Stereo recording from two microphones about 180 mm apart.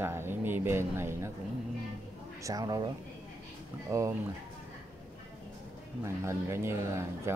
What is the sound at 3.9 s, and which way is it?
Speech, 15° right (ahead or behind).